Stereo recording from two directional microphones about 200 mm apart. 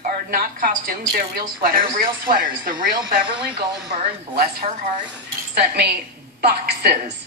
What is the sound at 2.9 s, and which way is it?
Speech, 20° right (ahead or behind).